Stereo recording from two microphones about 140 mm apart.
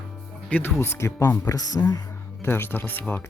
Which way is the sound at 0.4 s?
5° left (ahead or behind).